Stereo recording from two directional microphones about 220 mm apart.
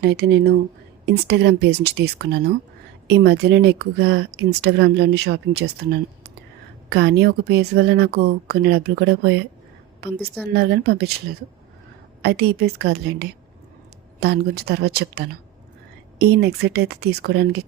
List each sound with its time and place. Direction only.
0.0 s speech: 50° right (ahead or behind)
6.9 s speech: 50° right (ahead or behind)
10.5 s speech: 45° right (ahead or behind)